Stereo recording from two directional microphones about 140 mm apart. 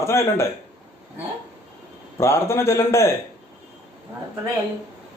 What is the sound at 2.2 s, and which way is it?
Speech, 15° left (ahead or behind).